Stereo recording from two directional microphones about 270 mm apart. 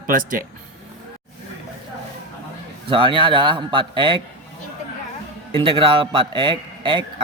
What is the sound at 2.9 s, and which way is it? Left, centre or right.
A man's voice, centre.